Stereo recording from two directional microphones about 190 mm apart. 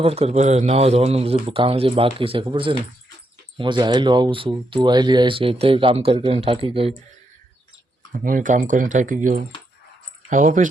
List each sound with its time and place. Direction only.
0.0 s speech: 35° right (ahead or behind)
8.1 s speech: 45° right (ahead or behind)